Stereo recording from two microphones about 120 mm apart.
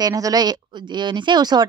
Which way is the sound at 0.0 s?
30° right (ahead or behind).